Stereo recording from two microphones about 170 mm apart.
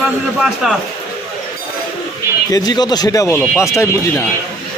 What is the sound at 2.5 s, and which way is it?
Speech, 25° left (ahead or behind).